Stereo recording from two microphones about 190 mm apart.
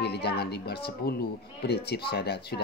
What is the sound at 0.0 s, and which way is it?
A woman's voice, 60° left (ahead or behind).